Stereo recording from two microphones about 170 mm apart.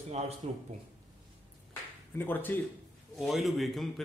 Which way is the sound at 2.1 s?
10° left (ahead or behind).